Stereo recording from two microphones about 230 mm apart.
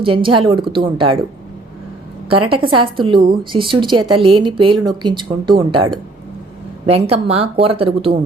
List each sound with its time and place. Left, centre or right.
0.0 s speech: right
2.3 s speech: right